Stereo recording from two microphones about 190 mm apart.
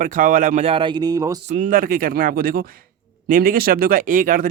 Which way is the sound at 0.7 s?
25° right (ahead or behind).